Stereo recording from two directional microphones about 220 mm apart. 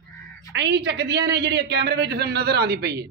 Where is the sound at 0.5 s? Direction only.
50° right (ahead or behind).